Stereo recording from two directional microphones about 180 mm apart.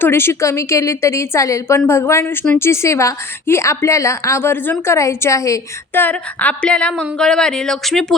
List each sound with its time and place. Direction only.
0.0 s a woman's voice: 15° left (ahead or behind)